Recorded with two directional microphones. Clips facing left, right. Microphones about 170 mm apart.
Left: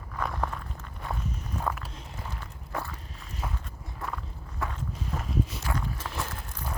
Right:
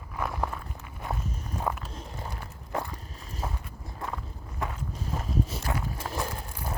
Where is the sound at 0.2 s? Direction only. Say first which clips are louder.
Even; 5° right (ahead or behind).